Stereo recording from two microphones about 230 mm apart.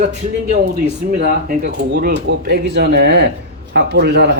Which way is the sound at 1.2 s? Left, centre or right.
Right.